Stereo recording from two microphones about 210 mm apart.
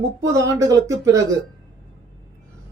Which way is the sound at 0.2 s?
15° right (ahead or behind).